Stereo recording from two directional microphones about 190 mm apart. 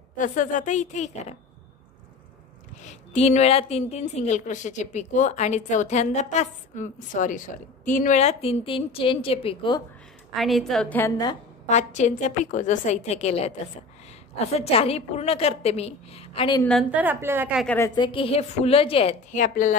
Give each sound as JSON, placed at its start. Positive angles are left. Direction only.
{"t": 0.2, "sound": "a woman's voice", "side_deg": 45}
{"t": 2.8, "sound": "a woman's voice", "side_deg": 40}
{"t": 10.3, "sound": "a woman's voice", "side_deg": 0}
{"t": 11.6, "sound": "a woman's voice", "side_deg": 35}
{"t": 16.9, "sound": "a woman's voice", "side_deg": -10}
{"t": 17.6, "sound": "a woman's voice", "side_deg": 15}
{"t": 17.9, "sound": "a woman's voice", "side_deg": 25}
{"t": 19.3, "sound": "speech", "side_deg": 40}